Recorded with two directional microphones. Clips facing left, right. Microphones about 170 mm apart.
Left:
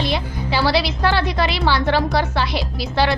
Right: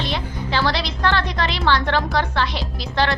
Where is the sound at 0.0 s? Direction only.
10° left (ahead or behind).